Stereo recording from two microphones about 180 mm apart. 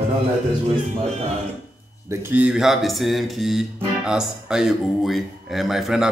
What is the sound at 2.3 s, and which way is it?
Music, 5° right (ahead or behind).